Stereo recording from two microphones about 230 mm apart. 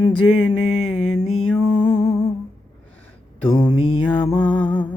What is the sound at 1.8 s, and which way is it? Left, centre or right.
Humming, centre.